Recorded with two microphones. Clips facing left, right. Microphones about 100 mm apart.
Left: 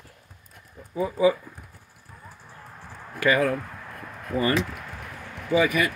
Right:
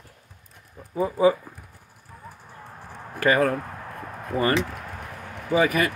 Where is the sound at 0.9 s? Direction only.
40° right (ahead or behind).